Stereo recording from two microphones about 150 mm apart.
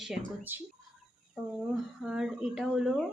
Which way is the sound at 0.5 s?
15° right (ahead or behind).